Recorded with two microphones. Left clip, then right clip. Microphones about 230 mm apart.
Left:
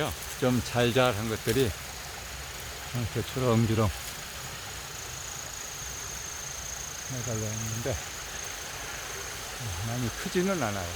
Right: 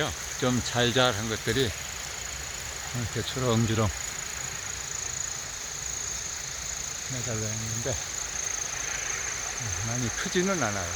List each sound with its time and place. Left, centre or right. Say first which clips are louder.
0.0 s speech: right 1 dB; centre
3.4 s speech: left 1 dB; centre
10.3 s speech: right 1 dB; centre